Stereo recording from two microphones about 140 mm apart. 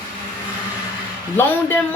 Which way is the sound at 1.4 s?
15° left (ahead or behind).